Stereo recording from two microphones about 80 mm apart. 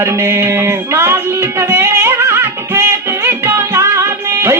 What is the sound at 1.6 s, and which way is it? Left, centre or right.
Music, right.